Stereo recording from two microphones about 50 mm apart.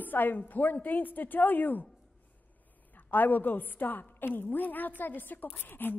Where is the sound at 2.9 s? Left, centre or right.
Left.